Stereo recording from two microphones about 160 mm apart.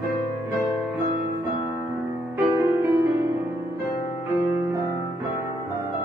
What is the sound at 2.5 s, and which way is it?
Music, 20° right (ahead or behind).